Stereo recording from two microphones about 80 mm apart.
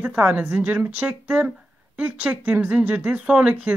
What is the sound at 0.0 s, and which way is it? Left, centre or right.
A woman's voice, centre.